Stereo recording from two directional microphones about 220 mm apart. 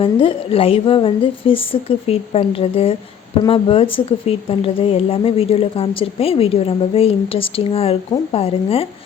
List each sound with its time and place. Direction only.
0.0 s a woman's voice: 25° left (ahead or behind)